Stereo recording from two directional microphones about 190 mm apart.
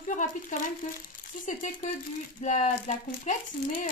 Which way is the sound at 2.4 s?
40° left (ahead or behind).